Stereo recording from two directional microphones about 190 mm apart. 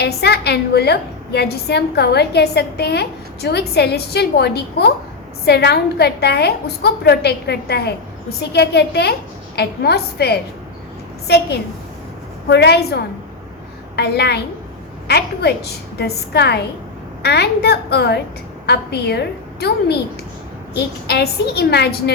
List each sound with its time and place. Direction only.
0.0 s a woman's voice: 60° left (ahead or behind)
12.5 s a woman's voice: 60° left (ahead or behind)